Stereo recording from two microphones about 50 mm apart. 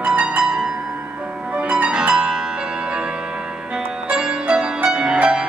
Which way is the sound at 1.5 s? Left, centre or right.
Right.